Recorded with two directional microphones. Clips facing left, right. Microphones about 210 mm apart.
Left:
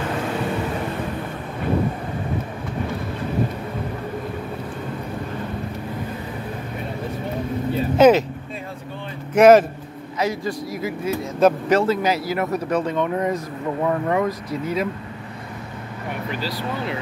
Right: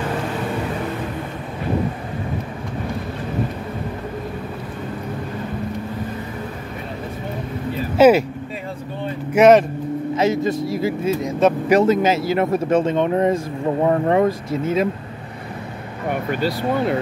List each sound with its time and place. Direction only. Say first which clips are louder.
8.0 s speech: right 1 dB; 10° right (ahead or behind)
9.3 s speech: even; centre (ahead or behind)
10.1 s speech: right 4 dB; 25° right (ahead or behind)
16.3 s speech: right 6 dB; 55° right (ahead or behind)